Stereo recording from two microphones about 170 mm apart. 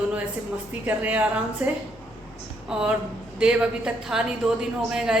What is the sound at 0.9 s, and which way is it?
Speech, 10° right (ahead or behind).